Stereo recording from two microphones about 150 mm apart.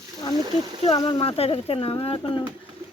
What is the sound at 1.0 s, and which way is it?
Speech, 35° left (ahead or behind).